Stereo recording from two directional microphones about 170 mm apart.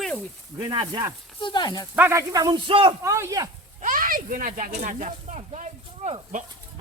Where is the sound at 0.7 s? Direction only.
25° right (ahead or behind).